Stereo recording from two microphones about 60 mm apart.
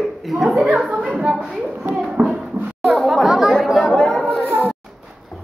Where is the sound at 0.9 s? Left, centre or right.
Right.